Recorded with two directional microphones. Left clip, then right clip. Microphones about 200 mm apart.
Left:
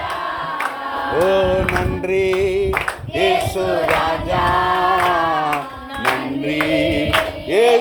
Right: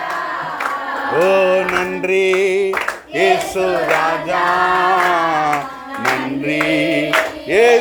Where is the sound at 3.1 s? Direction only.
5° right (ahead or behind).